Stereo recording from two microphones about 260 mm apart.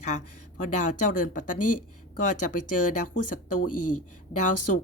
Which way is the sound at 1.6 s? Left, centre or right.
Left.